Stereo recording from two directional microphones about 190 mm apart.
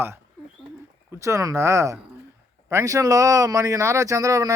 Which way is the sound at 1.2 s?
15° right (ahead or behind).